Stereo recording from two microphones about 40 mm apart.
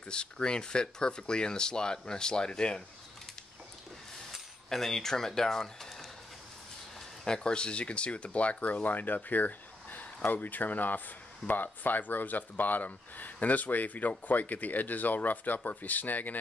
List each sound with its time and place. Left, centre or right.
0.1 s speech: left
4.6 s speech: centre
7.2 s speech: left